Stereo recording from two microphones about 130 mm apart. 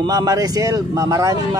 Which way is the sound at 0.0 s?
30° right (ahead or behind).